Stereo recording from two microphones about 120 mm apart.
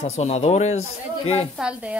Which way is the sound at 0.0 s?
65° left (ahead or behind).